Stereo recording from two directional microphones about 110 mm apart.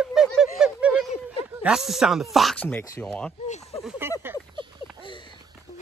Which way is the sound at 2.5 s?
15° left (ahead or behind).